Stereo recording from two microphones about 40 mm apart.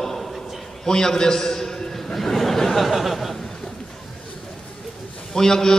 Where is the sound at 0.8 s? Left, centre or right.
Centre.